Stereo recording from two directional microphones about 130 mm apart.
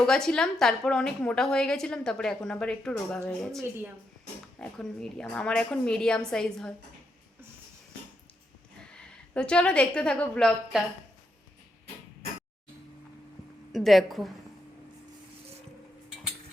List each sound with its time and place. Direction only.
0.0 s a woman's voice: 5° left (ahead or behind)
3.6 s speech: 20° right (ahead or behind)
4.6 s a woman's voice: 5° left (ahead or behind)
9.3 s a woman's voice: 10° left (ahead or behind)
13.7 s a woman's voice: centre (ahead or behind)